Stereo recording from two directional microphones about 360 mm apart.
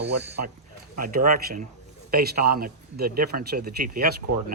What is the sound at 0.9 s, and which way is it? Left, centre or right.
Speech, right.